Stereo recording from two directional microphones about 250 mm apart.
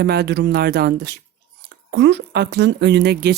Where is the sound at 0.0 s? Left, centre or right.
Right.